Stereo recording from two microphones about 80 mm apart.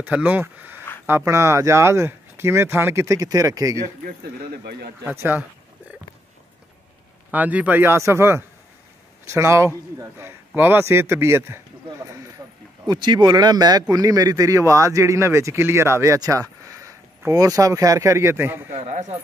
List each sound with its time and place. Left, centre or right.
0.0 s speech: right
1.0 s a man's voice: right
3.2 s speech: right
5.0 s speech: right
7.2 s speech: centre
7.9 s a man's voice: right
12.4 s a sound: right
12.8 s speech: right
16.2 s a sound: right
17.3 s speech: right